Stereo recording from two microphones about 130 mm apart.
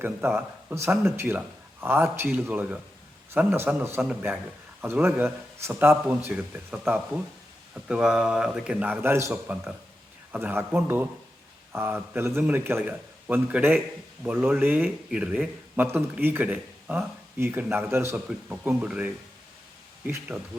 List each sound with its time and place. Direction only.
0.0 s speech: 15° right (ahead or behind)